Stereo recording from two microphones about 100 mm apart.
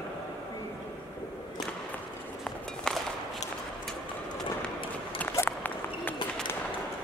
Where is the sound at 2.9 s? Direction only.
5° left (ahead or behind).